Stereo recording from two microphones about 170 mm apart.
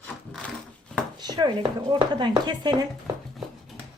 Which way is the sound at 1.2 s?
25° right (ahead or behind).